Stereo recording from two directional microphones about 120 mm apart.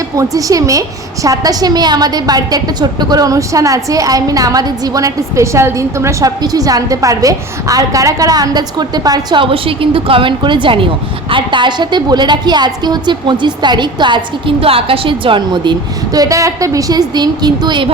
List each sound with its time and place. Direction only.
0.2 s a woman's voice: 30° right (ahead or behind)
9.4 s a woman's voice: 50° right (ahead or behind)
16.1 s a woman's voice: 30° right (ahead or behind)